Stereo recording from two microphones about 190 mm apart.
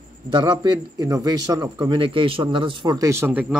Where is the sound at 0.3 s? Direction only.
25° right (ahead or behind).